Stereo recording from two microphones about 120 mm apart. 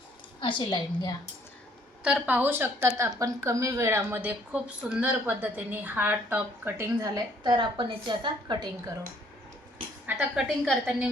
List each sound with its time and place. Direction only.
0.3 s a woman's voice: 45° left (ahead or behind)
2.0 s a woman's voice: 10° right (ahead or behind)
3.1 s a woman's voice: 30° right (ahead or behind)
7.0 s a woman's voice: 30° right (ahead or behind)
10.1 s a woman's voice: 5° right (ahead or behind)